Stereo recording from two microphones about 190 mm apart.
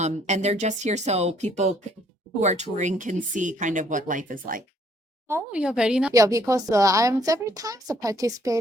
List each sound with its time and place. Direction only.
0.0 s speech: 35° right (ahead or behind)
5.3 s a woman's voice: 5° right (ahead or behind)
6.1 s speech: 15° right (ahead or behind)